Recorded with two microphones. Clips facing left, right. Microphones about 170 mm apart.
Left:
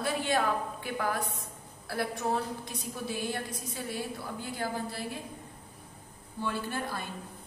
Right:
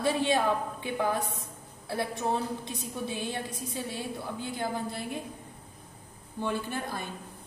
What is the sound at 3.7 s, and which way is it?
A woman's voice, 25° right (ahead or behind).